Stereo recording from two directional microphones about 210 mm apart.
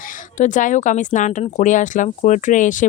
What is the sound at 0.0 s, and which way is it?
Speech, 40° left (ahead or behind).